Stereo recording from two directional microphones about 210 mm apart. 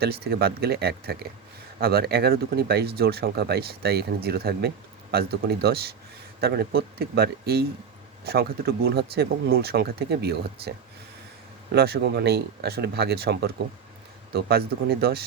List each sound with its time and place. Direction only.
0.0 s speech: 45° right (ahead or behind)